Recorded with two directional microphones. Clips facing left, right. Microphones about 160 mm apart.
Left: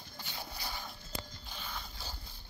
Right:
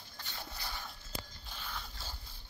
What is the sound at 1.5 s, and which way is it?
Music, centre (ahead or behind).